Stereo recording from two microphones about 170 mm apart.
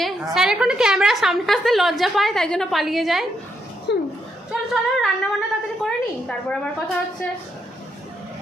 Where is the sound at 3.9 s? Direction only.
80° left.